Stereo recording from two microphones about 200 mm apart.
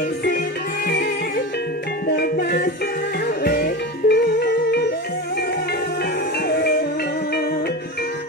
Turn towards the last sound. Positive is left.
turn(degrees=50)  # may be behind; listen again after turning